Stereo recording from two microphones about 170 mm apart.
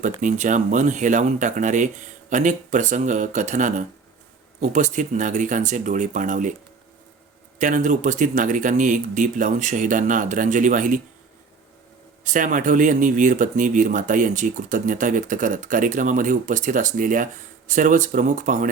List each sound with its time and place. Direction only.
0.0 s speech: 45° right (ahead or behind)
7.6 s speech: 50° right (ahead or behind)
12.2 s speech: 50° right (ahead or behind)